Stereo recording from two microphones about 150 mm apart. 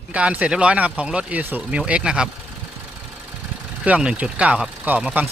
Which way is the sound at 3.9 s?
10° right (ahead or behind).